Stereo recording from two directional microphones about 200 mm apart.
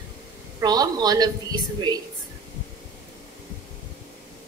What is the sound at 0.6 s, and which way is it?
A woman's voice, 20° right (ahead or behind).